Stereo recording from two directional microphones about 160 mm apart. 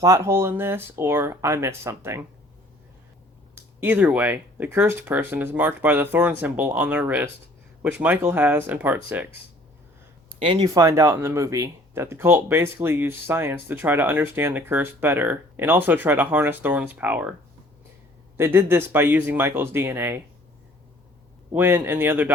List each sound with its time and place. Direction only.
0.0 s speech: 20° right (ahead or behind)
3.5 s speech: 10° right (ahead or behind)
10.2 s speech: 35° right (ahead or behind); by 17.3 s 10° right (ahead or behind)
18.3 s speech: 15° right (ahead or behind)
21.5 s speech: 15° right (ahead or behind)